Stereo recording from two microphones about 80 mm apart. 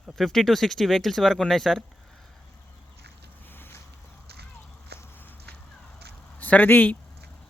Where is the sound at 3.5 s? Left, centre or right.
Left.